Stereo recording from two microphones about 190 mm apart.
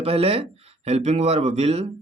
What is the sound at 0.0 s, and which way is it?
Speech, 30° right (ahead or behind).